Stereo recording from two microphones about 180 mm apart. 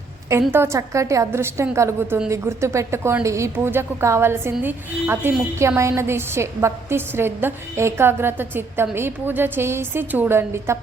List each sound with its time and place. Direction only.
0.5 s a woman's voice: 15° right (ahead or behind)